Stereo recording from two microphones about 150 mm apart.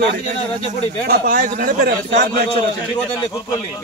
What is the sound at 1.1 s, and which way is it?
A man's voice, 90° right.